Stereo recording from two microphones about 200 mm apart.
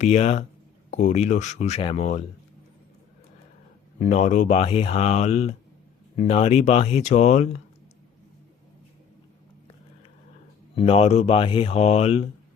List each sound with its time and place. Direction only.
0.0 s speech: 35° left (ahead or behind)
4.0 s speech: 35° left (ahead or behind)
10.8 s speech: 30° left (ahead or behind)